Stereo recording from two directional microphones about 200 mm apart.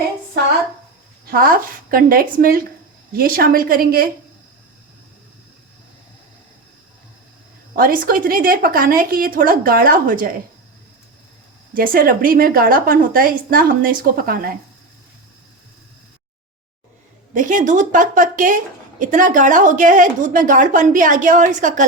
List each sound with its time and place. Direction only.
1.3 s a woman's voice: 45° right (ahead or behind)
7.8 s a woman's voice: 45° right (ahead or behind)
11.7 s a woman's voice: 45° right (ahead or behind)
17.3 s a woman's voice: 40° right (ahead or behind)